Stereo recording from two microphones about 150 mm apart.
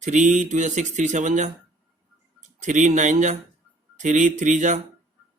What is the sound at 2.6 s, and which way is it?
Speech, 55° right (ahead or behind).